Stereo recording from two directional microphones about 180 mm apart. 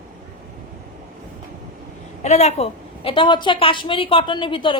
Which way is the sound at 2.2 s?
35° left (ahead or behind).